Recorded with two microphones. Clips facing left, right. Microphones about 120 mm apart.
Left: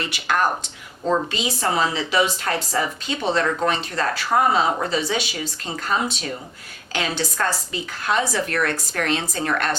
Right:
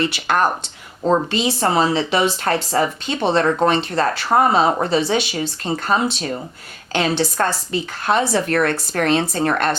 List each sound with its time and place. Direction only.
0.1 s speech: 30° right (ahead or behind)
2.2 s speech: 55° right (ahead or behind)
2.7 s speech: 30° right (ahead or behind)